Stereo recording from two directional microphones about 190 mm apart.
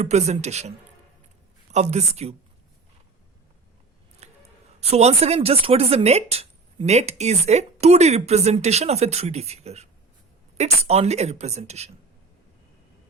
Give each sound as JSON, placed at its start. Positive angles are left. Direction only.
{"t": 0.0, "sound": "speech", "side_deg": -35}
{"t": 1.7, "sound": "speech", "side_deg": -35}
{"t": 4.2, "sound": "scissors", "side_deg": -35}
{"t": 4.8, "sound": "speech", "side_deg": -35}